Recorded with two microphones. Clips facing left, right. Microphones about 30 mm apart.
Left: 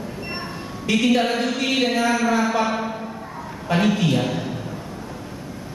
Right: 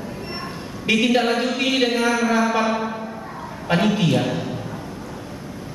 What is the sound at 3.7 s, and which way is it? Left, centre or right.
Speech, right.